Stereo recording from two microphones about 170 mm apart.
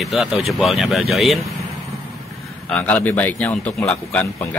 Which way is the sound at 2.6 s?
5° left (ahead or behind).